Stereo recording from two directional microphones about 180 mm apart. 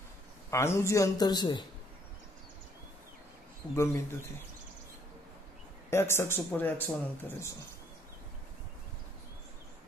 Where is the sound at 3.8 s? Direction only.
15° left (ahead or behind).